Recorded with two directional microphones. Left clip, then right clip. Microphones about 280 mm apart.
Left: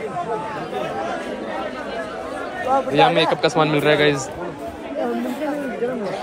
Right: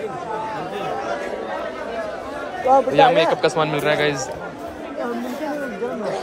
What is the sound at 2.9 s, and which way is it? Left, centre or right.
A man's voice, centre.